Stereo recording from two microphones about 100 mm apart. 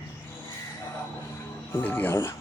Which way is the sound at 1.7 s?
15° left (ahead or behind).